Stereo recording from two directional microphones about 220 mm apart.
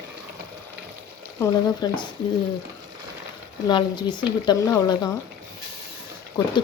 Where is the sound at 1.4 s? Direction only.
20° left (ahead or behind).